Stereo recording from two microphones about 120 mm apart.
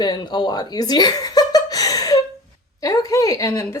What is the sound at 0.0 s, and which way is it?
Speech, 35° left (ahead or behind).